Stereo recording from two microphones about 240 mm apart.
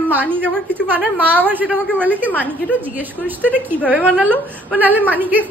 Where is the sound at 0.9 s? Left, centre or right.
Centre.